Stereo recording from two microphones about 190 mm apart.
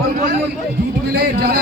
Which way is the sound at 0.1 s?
45° right (ahead or behind).